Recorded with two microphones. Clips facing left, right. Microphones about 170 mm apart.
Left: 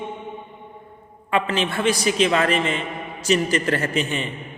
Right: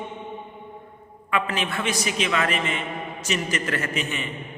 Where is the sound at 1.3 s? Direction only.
30° left (ahead or behind).